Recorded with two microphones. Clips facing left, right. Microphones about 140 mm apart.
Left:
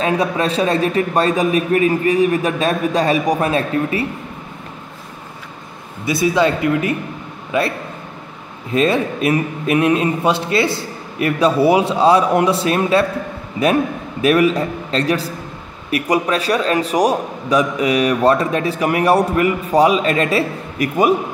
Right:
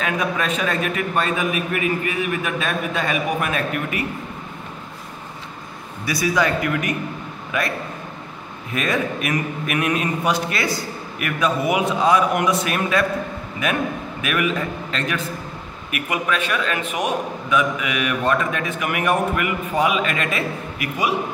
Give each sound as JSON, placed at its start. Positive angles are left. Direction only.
{"t": 0.0, "sound": "a man's voice", "side_deg": 30}
{"t": 6.0, "sound": "a man's voice", "side_deg": 25}
{"t": 8.7, "sound": "a man's voice", "side_deg": 30}
{"t": 14.2, "sound": "a man's voice", "side_deg": 35}